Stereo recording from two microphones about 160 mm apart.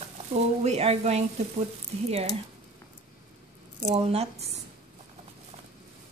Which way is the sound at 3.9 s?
40° right (ahead or behind).